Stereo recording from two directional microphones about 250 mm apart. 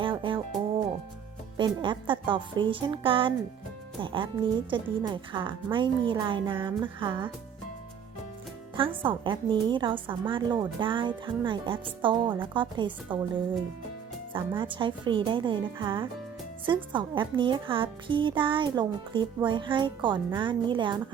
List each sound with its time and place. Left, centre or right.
0.0 s music: centre
1.5 s speech: centre
9.0 s speech: centre
14.3 s speech: centre